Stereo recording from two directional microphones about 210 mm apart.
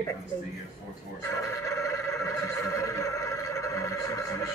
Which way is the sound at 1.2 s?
15° left (ahead or behind).